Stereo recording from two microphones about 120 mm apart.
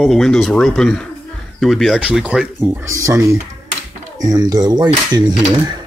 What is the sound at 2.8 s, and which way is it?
Speech, 25° right (ahead or behind).